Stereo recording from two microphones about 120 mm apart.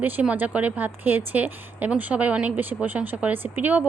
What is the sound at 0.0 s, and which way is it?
A woman's voice, 15° right (ahead or behind).